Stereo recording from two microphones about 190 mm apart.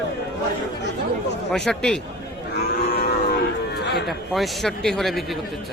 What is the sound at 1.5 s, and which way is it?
Speech, 5° left (ahead or behind).